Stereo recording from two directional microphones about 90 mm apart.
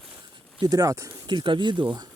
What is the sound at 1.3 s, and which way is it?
Speech, 65° right (ahead or behind).